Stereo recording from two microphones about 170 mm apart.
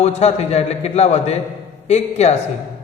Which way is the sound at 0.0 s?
40° left (ahead or behind).